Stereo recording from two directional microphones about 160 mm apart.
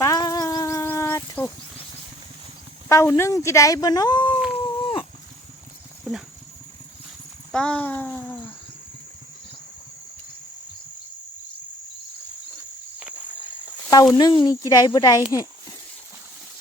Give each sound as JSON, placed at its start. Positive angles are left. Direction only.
{"t": 0.0, "sound": "a sound", "side_deg": 20}
{"t": 2.9, "sound": "speech", "side_deg": 15}
{"t": 4.6, "sound": "dog", "side_deg": 35}
{"t": 6.1, "sound": "speech", "side_deg": 0}
{"t": 7.5, "sound": "speech", "side_deg": 5}
{"t": 13.0, "sound": "walk", "side_deg": -10}
{"t": 13.9, "sound": "speech", "side_deg": 25}